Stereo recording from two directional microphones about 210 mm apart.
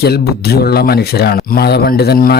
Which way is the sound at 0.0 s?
50° left (ahead or behind).